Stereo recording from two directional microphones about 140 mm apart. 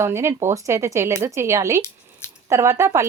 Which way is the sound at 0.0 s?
20° right (ahead or behind).